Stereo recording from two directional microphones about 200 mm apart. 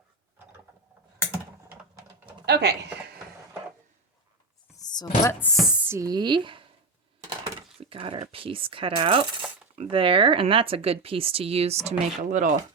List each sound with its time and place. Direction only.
2.5 s speech: 55° right (ahead or behind)
4.8 s speech: 20° left (ahead or behind)
5.5 s chopping: 5° right (ahead or behind)
6.0 s speech: 20° right (ahead or behind); by 12.5 s 40° right (ahead or behind)